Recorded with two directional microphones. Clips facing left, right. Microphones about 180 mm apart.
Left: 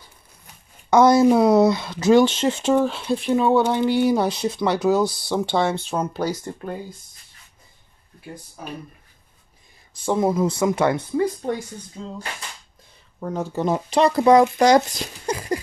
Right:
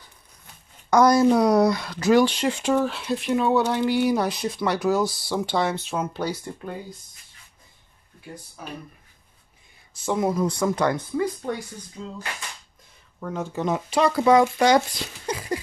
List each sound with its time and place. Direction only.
0.8 s a woman's voice: 25° left (ahead or behind); by 6.7 s 45° left (ahead or behind)
10.0 s speech: 30° left (ahead or behind)
13.2 s speech: 35° left (ahead or behind)